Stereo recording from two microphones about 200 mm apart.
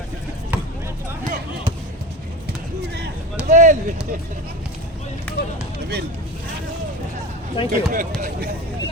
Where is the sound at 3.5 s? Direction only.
40° right (ahead or behind).